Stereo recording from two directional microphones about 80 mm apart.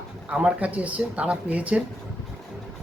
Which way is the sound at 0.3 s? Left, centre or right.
Centre.